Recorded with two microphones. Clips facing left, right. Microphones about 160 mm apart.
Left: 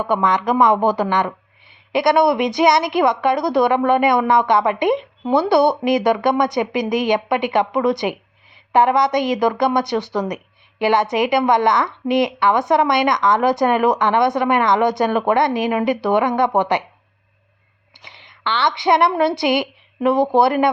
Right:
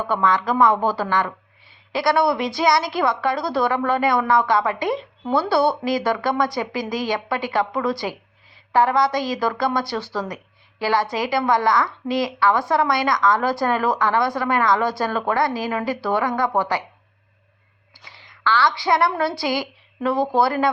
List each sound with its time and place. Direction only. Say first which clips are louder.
0.0 s a woman's voice: left 2 dB; 15° left (ahead or behind)
17.9 s a woman's voice: left 2 dB; 20° left (ahead or behind)